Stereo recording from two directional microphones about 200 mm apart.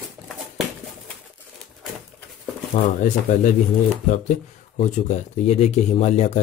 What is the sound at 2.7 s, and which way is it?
Speech, 35° left (ahead or behind).